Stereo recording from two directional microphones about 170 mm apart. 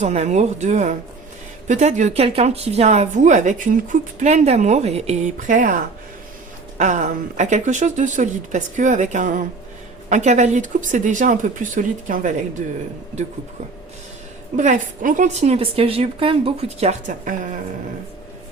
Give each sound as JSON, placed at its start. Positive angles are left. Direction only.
{"t": 0.0, "sound": "a woman's voice", "side_deg": -40}
{"t": 14.5, "sound": "a woman's voice", "side_deg": -50}